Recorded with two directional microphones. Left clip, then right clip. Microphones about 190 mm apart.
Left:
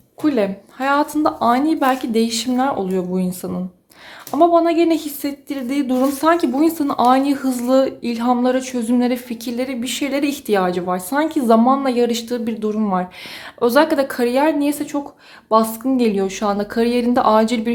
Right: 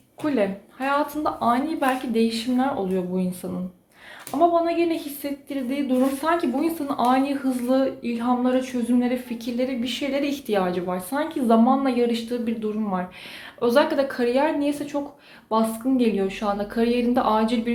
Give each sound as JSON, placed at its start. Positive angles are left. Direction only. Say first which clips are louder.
{"t": 0.2, "sound": "a woman's voice", "louder": "left 5 dB", "side_deg": 45}
{"t": 4.4, "sound": "a woman's voice", "louder": "left 6 dB", "side_deg": 45}